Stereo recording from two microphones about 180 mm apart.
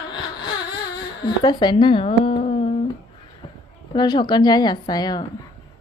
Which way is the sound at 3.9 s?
25° left (ahead or behind).